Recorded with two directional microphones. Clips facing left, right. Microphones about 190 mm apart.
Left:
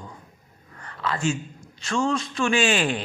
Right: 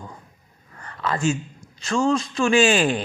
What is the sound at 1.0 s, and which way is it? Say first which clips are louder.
A man's voice: right 3 dB; 40° right (ahead or behind).